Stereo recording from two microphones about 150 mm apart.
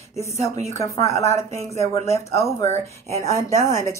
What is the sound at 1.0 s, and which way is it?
Speech, 20° left (ahead or behind).